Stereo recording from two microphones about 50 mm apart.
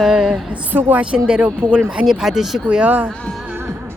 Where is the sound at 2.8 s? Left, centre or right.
Right.